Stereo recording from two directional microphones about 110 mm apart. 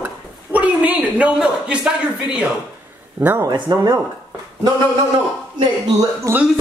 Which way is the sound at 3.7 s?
30° right (ahead or behind).